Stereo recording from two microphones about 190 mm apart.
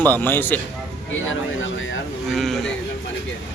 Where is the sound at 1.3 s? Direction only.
90° left.